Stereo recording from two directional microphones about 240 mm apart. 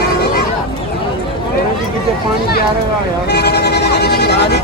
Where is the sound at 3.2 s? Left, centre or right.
Left.